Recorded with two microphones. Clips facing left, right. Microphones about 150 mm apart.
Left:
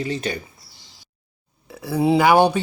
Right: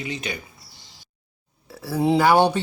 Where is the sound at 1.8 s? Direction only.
15° left (ahead or behind).